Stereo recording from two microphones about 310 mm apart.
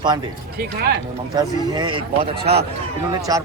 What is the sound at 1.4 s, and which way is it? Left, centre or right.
Speech, centre.